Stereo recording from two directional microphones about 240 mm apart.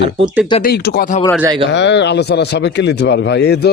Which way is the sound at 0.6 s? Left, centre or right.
Left.